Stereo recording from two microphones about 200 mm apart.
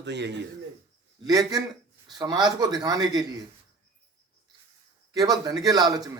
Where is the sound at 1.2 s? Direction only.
20° right (ahead or behind).